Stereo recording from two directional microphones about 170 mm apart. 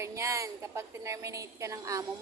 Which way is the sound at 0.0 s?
20° right (ahead or behind).